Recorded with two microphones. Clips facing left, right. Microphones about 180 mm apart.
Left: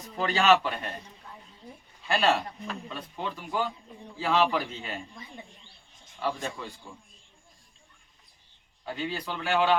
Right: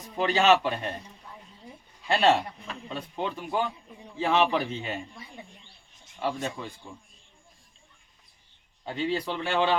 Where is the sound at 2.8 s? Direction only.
25° right (ahead or behind).